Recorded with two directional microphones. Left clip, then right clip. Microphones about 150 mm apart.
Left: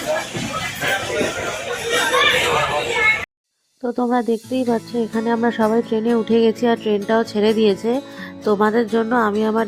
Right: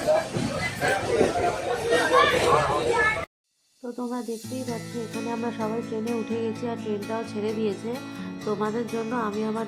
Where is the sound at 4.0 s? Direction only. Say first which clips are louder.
Left 13 dB; 55° left (ahead or behind).